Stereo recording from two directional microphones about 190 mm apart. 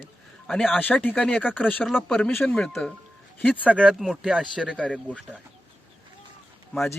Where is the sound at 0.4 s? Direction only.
5° left (ahead or behind).